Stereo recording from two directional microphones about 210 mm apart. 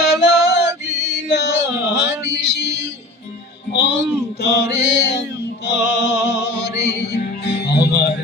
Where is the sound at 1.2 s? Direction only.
55° left (ahead or behind).